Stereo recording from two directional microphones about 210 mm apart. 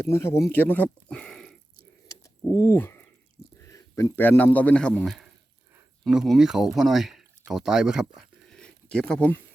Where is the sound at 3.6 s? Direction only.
15° left (ahead or behind); by 8.0 s 5° right (ahead or behind).